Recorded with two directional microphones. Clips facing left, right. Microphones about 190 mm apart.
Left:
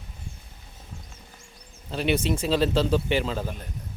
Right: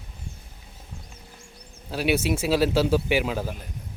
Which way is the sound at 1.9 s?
5° right (ahead or behind).